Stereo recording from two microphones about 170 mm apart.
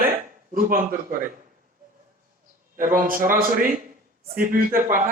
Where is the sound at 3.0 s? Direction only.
55° right (ahead or behind).